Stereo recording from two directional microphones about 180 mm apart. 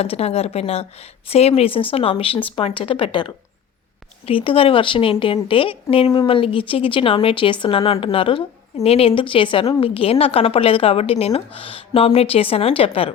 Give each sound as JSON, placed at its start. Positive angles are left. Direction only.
{"t": 0.0, "sound": "a woman's voice", "side_deg": 35}